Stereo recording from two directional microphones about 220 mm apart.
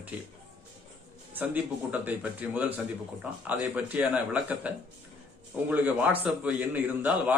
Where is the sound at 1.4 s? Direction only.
5° right (ahead or behind).